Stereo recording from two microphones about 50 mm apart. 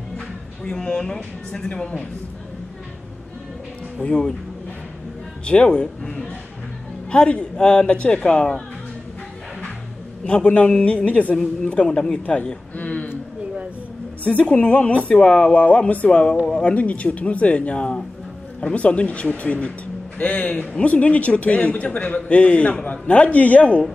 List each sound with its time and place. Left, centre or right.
0.7 s a man's voice: centre
4.0 s speech: centre
5.4 s a man's voice: left
10.2 s a man's voice: left
12.7 s a sound: left
14.2 s a man's voice: left